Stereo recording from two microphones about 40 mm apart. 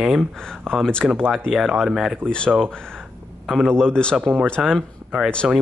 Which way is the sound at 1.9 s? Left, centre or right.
Centre.